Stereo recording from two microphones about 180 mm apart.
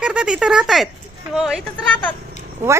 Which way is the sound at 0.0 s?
5° right (ahead or behind).